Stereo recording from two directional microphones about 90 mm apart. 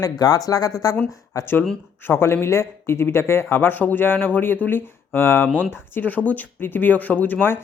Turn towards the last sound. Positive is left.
turn(degrees=20)  # may be behind; listen again after turning